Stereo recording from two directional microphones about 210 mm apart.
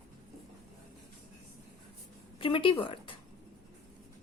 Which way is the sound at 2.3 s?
25° left (ahead or behind).